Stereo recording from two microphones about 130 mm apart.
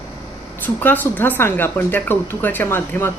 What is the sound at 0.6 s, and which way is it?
Speech, 15° left (ahead or behind).